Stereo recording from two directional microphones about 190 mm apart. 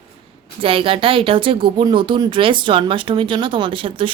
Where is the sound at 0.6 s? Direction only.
30° right (ahead or behind).